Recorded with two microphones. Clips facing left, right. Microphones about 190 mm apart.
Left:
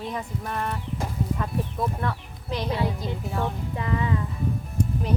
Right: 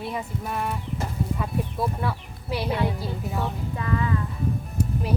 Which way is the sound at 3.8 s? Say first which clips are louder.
Even; 20° left (ahead or behind).